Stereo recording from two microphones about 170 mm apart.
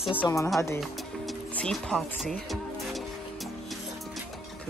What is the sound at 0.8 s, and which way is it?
Music, centre (ahead or behind).